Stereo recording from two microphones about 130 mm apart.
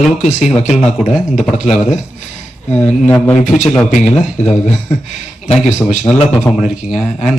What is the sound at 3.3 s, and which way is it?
A man's voice, 70° left (ahead or behind).